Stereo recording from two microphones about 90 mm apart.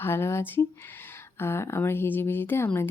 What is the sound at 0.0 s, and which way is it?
A woman's voice, 25° left (ahead or behind).